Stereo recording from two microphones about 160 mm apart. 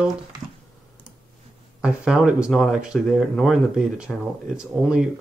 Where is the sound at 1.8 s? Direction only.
5° right (ahead or behind).